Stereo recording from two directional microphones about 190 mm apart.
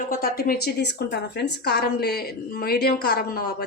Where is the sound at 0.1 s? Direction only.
50° left (ahead or behind).